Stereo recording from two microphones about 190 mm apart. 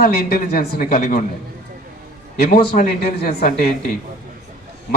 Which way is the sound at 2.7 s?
45° left (ahead or behind).